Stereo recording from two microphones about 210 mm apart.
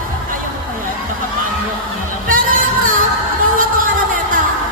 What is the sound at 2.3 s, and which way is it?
Music, 40° right (ahead or behind).